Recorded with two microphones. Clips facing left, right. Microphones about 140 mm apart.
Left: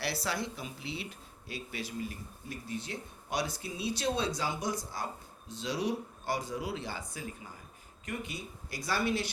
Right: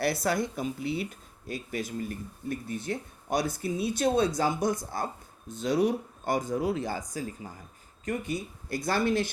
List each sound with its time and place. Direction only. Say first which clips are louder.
0.0 s speech: right 7 dB; 50° right (ahead or behind)